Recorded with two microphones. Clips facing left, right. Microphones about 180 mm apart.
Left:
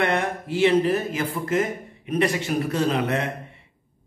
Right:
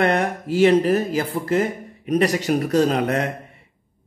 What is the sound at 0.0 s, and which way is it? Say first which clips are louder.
A man's voice: right 4 dB; 40° right (ahead or behind).